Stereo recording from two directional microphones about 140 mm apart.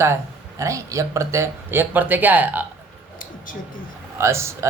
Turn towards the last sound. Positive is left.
turn(degrees=-20)  # may be behind; listen again after turning